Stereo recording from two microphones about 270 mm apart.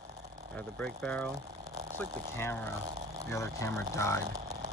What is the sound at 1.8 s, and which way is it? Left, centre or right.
Speech, right.